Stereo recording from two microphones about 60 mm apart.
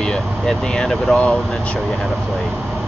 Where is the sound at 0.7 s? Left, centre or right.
Centre.